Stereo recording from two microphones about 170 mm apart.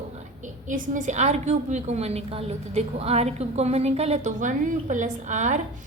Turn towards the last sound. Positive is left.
turn(degrees=-45)  # may be behind; listen again after turning